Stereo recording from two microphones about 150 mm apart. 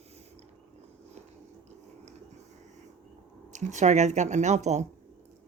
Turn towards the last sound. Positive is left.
turn(degrees=-50)  # may be behind; listen again after turning